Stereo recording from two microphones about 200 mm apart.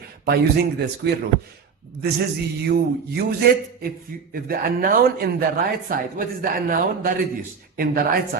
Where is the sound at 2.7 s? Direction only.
50° right (ahead or behind).